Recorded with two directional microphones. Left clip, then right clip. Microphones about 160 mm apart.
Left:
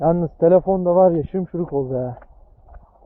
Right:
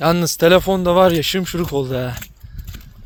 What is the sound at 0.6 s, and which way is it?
Speech, 55° right (ahead or behind).